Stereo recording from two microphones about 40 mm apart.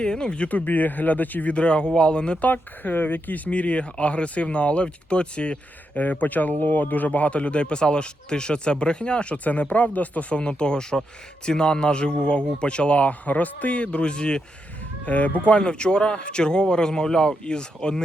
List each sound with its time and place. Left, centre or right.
0.0 s speech: left
0.4 s speech: left
1.5 s speech: left
2.4 s speech: left
6.0 s speech: left
9.4 s speech: left
10.5 s speech: left
15.0 s speech: left
15.4 s speech: left